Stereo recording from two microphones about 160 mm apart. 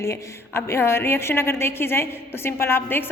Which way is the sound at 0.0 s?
15° left (ahead or behind).